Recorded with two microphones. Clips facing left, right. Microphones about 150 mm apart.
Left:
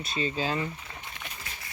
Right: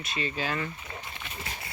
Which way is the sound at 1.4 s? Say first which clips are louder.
Right 4 dB; 30° right (ahead or behind).